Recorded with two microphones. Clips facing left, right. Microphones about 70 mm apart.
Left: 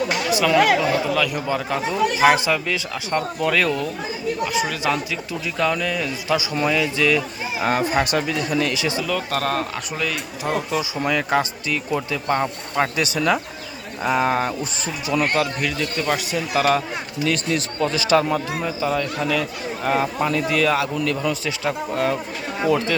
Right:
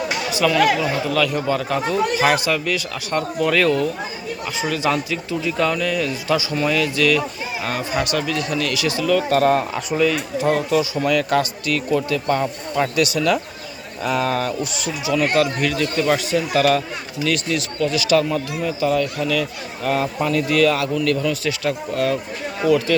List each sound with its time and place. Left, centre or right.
0.4 s a man's voice: centre
3.1 s a man's voice: centre
7.6 s speech: left
9.0 s speech: centre
10.1 s a man's voice: centre; by 14.7 s left
15.4 s a man's voice: centre
16.6 s a man's voice: centre
17.2 s speech: left
18.6 s a man's voice: centre